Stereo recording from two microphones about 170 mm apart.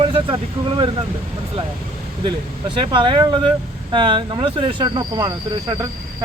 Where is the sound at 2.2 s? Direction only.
30° right (ahead or behind).